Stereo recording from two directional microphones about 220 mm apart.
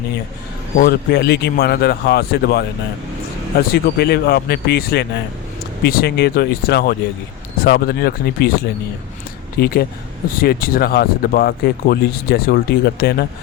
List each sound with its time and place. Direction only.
0.8 s speech: 45° left (ahead or behind)
3.7 s speech: 45° left (ahead or behind)